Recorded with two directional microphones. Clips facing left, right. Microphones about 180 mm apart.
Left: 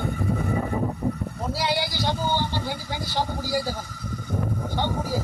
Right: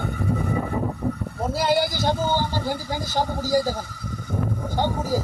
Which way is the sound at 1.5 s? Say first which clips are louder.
Right 5 dB; 50° right (ahead or behind).